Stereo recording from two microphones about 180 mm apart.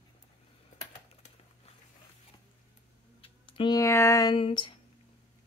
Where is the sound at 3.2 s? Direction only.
25° left (ahead or behind).